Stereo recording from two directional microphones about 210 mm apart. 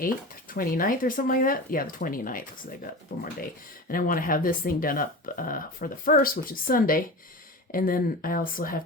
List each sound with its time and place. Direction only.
0.0 s speech: 45° left (ahead or behind)
3.8 s speech: 40° left (ahead or behind)